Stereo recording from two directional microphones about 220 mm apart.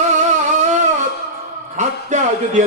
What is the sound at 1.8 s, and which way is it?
Music, 35° right (ahead or behind).